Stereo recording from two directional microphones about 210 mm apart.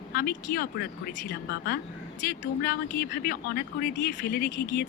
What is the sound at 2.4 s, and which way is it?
Speech, 45° left (ahead or behind).